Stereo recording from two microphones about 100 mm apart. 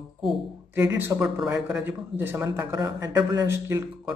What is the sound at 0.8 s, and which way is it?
Speech, 15° right (ahead or behind).